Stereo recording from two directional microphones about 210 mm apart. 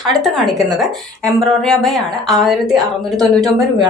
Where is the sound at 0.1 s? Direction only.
Centre (ahead or behind).